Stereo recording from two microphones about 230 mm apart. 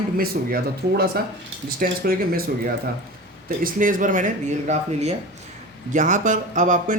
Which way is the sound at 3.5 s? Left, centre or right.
Right.